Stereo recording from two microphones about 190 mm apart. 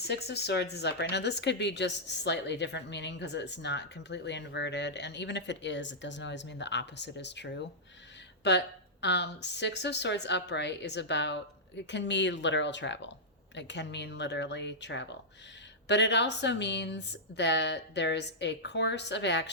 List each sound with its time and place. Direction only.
0.0 s speech: 60° left (ahead or behind)